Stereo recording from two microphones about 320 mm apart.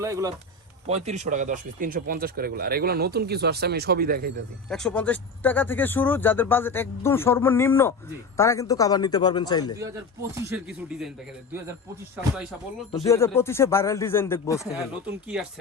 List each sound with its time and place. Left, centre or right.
0.0 s speech: centre
0.9 s speech: centre
4.7 s speech: centre
10.3 s speech: centre
12.9 s speech: centre
14.7 s speech: centre